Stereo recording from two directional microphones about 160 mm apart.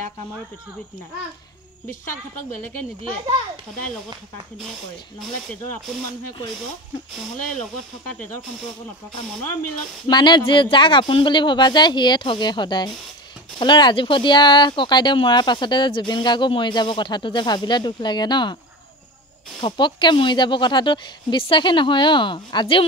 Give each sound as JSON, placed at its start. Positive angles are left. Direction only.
{"t": 10.0, "sound": "speech", "side_deg": 25}
{"t": 19.6, "sound": "speech", "side_deg": 30}